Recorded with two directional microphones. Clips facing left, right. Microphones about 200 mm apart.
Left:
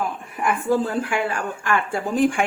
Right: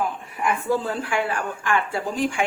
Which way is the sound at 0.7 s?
45° left (ahead or behind).